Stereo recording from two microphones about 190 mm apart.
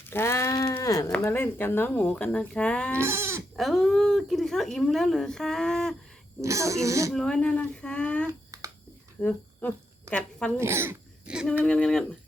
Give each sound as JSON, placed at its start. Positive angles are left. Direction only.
{"t": 0.0, "sound": "a sound", "side_deg": 10}
{"t": 1.1, "sound": "speech", "side_deg": 10}
{"t": 2.9, "sound": "speech", "side_deg": -15}
{"t": 3.5, "sound": "speech", "side_deg": 0}
{"t": 6.4, "sound": "speech", "side_deg": -15}
{"t": 7.1, "sound": "speech", "side_deg": 5}
{"t": 10.6, "sound": "speech", "side_deg": -15}